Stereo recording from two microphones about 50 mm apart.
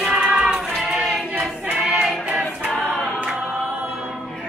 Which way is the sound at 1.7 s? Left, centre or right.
Right.